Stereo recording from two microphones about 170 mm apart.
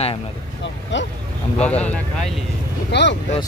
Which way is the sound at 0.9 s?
90° left.